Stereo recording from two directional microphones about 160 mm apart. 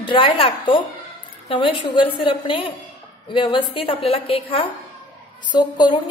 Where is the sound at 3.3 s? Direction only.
30° left (ahead or behind).